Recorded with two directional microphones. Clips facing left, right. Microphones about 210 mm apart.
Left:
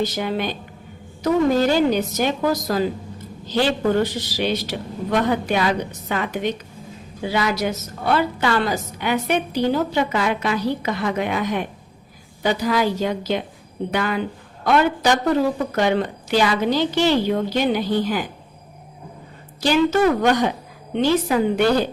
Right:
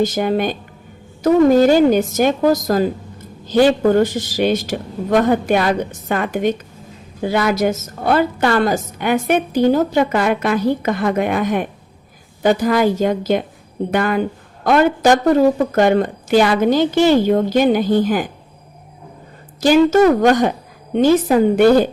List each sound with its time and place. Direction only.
0.0 s a woman's voice: 50° right (ahead or behind)
19.6 s a woman's voice: 45° right (ahead or behind)